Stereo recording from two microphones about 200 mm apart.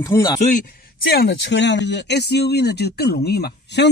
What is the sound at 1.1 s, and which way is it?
Speech, 55° left (ahead or behind).